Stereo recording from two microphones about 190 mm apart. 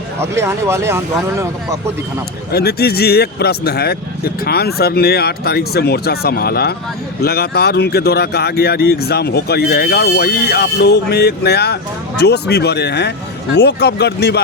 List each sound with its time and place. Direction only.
0.2 s speech: 15° right (ahead or behind)
2.5 s a man's voice: 55° left (ahead or behind)